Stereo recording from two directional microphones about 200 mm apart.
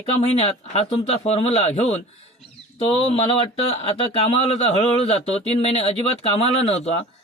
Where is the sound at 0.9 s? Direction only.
30° left (ahead or behind).